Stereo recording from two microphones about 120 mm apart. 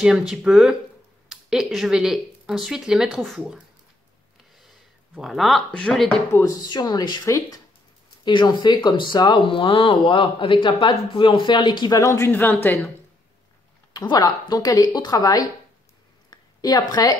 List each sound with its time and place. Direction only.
0.0 s speech: 5° right (ahead or behind)
4.6 s a sound: centre (ahead or behind)
5.7 s speech: 10° left (ahead or behind)
6.3 s speech: 20° left (ahead or behind)
6.7 s speech: 30° left (ahead or behind)
8.3 s speech: 40° left (ahead or behind)
12.0 s speech: 25° left (ahead or behind)
13.9 s speech: 35° left (ahead or behind)
16.3 s a sound: 35° left (ahead or behind)